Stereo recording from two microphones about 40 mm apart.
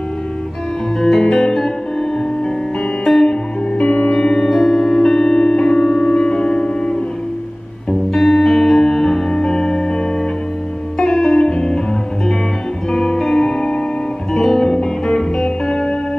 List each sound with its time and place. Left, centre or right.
1.0 s music: centre
3.7 s music: left
4.1 s music: centre
8.1 s music: centre
8.5 s music: centre
11.1 s music: centre
11.4 s music: centre
12.9 s music: centre